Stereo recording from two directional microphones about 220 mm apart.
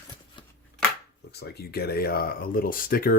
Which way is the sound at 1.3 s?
45° left (ahead or behind).